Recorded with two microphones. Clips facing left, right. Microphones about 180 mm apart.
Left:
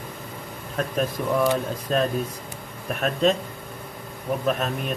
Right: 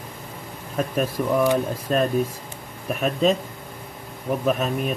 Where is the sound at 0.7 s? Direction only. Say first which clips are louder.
Right 2 dB; 10° right (ahead or behind).